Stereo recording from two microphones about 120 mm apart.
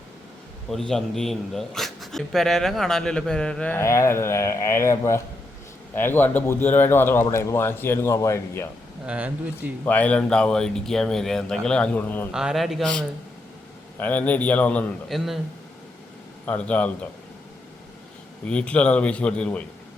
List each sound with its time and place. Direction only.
0.7 s a man's voice: 5° left (ahead or behind)
3.8 s speech: 25° left (ahead or behind)
9.0 s speech: 10° right (ahead or behind)
9.8 s speech: 10° left (ahead or behind)
12.3 s a man's voice: 5° right (ahead or behind); by 14.8 s 10° left (ahead or behind)
15.1 s a man's voice: centre (ahead or behind)
16.5 s speech: 10° left (ahead or behind)
18.4 s speech: 10° left (ahead or behind)